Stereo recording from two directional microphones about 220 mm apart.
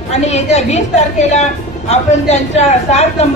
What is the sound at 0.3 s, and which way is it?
A woman's voice, 30° left (ahead or behind).